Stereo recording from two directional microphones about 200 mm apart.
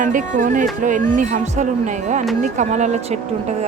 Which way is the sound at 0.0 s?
40° right (ahead or behind).